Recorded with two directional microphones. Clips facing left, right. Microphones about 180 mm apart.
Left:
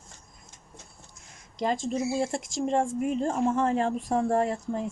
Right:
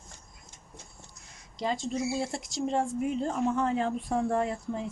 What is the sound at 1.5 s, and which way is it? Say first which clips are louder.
Speech: left 3 dB; 50° left (ahead or behind).